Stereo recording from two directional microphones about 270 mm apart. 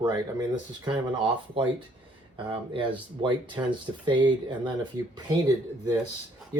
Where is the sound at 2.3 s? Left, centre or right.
Centre.